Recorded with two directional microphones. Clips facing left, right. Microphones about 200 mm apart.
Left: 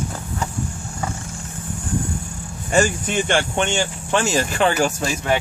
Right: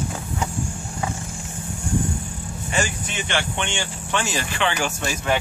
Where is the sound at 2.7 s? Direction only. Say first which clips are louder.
Left 8 dB; 45° left (ahead or behind).